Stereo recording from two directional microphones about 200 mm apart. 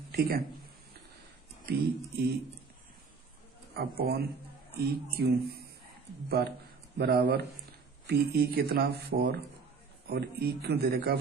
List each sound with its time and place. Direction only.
0.1 s speech: 50° right (ahead or behind)
1.7 s speech: 50° right (ahead or behind)
3.8 s speech: 50° right (ahead or behind)